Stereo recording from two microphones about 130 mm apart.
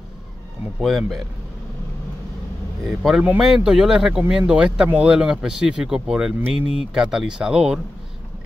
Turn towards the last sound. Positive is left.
turn(degrees=-5)  # may be behind; listen again after turning